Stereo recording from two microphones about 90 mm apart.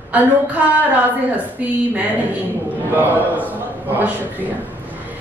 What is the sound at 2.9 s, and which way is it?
A man's voice, 20° right (ahead or behind).